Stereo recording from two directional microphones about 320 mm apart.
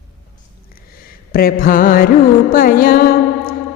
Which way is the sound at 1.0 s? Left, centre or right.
Left.